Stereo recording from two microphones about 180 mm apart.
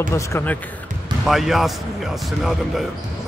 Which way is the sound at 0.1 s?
15° left (ahead or behind).